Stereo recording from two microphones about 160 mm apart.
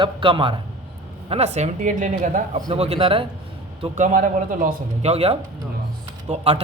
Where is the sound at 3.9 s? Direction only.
50° right (ahead or behind).